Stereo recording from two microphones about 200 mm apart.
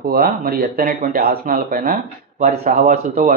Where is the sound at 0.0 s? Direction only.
45° right (ahead or behind).